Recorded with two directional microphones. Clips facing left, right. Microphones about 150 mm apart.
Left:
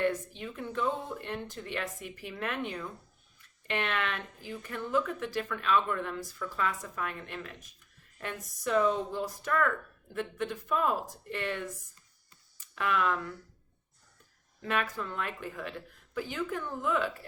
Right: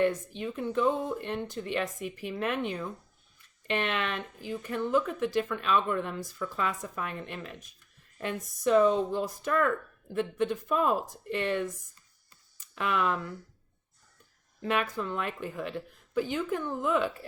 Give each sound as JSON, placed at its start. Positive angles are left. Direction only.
{"t": 0.3, "sound": "speech", "side_deg": -20}
{"t": 12.7, "sound": "speech", "side_deg": -20}
{"t": 14.6, "sound": "speech", "side_deg": -20}